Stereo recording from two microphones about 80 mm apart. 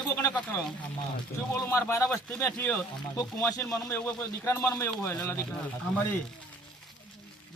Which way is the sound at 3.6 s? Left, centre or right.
Left.